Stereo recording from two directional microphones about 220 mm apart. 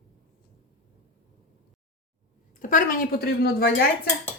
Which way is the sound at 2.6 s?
35° left (ahead or behind).